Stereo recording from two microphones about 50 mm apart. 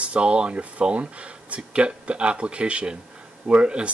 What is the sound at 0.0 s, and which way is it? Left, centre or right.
Speech, right.